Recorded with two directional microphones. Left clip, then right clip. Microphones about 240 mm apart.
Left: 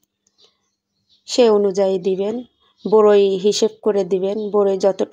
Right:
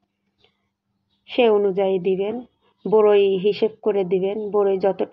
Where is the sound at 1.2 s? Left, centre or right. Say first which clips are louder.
Left 3 dB; left.